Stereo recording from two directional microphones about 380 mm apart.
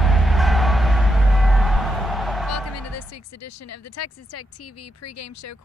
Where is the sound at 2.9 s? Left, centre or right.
Left.